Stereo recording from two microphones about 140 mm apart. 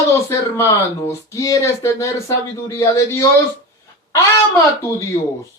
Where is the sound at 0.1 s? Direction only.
20° left (ahead or behind).